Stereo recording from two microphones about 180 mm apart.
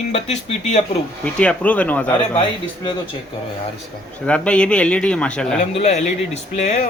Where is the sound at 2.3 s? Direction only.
30° left (ahead or behind).